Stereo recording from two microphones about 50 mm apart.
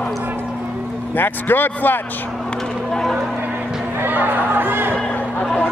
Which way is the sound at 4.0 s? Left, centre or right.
Right.